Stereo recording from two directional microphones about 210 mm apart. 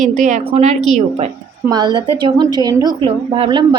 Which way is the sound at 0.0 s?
35° right (ahead or behind).